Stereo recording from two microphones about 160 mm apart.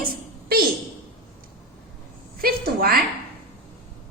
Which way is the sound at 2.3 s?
70° right (ahead or behind).